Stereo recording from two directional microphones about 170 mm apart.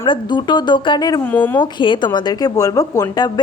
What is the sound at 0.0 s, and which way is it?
A woman's voice, 30° left (ahead or behind).